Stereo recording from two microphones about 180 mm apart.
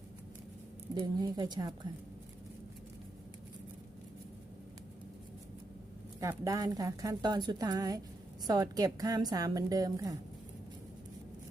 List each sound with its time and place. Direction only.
0.9 s a woman's voice: 25° right (ahead or behind)
6.1 s a woman's voice: 20° right (ahead or behind)